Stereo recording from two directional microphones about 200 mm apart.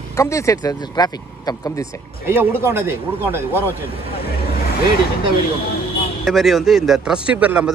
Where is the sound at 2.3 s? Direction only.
10° right (ahead or behind).